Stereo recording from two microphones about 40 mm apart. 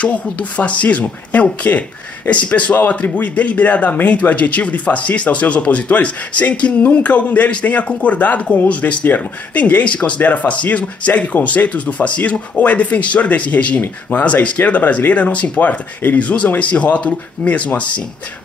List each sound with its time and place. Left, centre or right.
0.0 s speech: left
8.8 s speech: left
9.5 s speech: left